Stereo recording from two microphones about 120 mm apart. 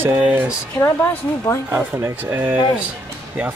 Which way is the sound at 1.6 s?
15° right (ahead or behind).